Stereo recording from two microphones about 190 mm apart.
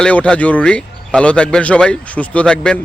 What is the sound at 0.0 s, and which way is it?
Speech, 5° left (ahead or behind).